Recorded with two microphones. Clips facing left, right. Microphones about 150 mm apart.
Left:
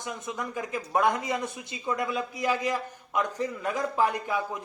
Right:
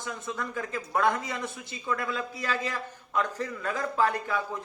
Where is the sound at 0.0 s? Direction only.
20° left (ahead or behind).